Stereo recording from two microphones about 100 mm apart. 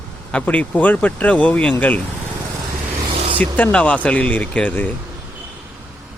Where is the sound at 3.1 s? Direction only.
60° right (ahead or behind).